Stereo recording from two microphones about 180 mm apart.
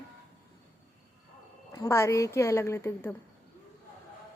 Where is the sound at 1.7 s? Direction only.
15° left (ahead or behind).